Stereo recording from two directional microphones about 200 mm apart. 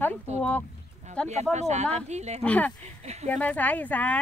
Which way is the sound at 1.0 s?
35° right (ahead or behind).